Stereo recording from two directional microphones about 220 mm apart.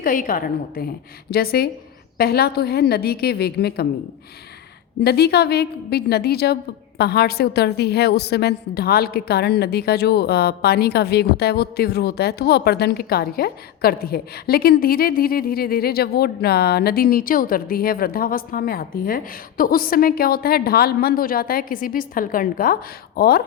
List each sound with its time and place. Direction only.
0.0 s a woman's voice: 40° left (ahead or behind)
5.0 s a woman's voice: 45° left (ahead or behind)